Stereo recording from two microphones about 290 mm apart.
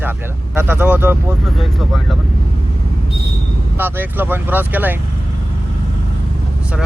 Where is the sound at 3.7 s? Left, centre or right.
Centre.